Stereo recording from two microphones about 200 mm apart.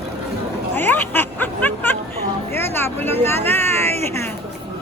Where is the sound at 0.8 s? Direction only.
10° left (ahead or behind).